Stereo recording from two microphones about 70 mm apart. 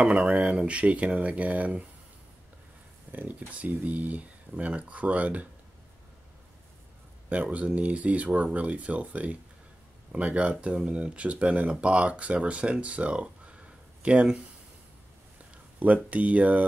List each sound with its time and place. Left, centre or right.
0.0 s speech: centre
3.1 s speech: right
7.5 s speech: centre
15.8 s speech: right